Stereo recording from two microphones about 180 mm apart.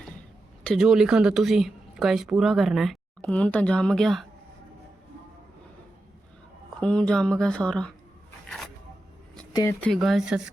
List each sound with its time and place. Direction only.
0.6 s a woman's voice: centre (ahead or behind)
6.7 s a woman's voice: 5° left (ahead or behind)
9.5 s speech: 20° left (ahead or behind)
9.8 s a woman's voice: centre (ahead or behind)